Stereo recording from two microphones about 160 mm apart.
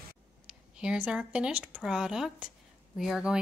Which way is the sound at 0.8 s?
5° right (ahead or behind).